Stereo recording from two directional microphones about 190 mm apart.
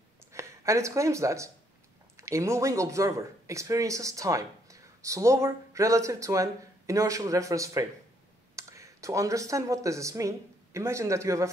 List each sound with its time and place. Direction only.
0.3 s speech: 15° right (ahead or behind)